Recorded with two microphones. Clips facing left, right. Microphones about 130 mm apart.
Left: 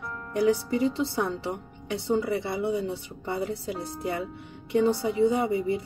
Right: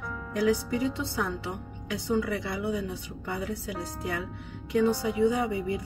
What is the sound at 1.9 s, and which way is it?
A woman's voice, 25° left (ahead or behind).